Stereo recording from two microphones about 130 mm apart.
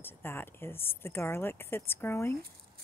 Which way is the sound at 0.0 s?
15° left (ahead or behind).